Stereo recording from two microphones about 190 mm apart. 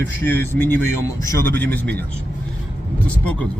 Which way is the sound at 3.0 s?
5° left (ahead or behind).